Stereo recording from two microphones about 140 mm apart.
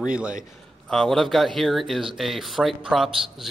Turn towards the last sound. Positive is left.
turn(degrees=0)  # may be behind; listen again after turning